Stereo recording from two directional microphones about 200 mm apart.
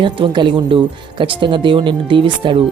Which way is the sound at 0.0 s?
25° right (ahead or behind).